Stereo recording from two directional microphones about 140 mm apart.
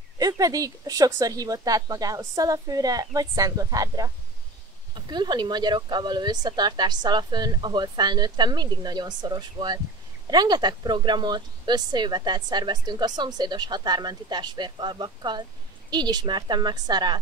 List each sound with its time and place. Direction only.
0.2 s a woman's voice: 25° right (ahead or behind)